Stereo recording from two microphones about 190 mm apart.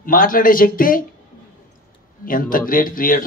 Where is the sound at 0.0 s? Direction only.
45° left (ahead or behind).